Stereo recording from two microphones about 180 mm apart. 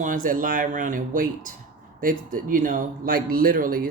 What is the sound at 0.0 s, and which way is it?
Speech, 50° right (ahead or behind).